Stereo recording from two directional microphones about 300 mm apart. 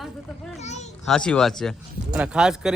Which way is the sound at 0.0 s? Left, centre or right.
Centre.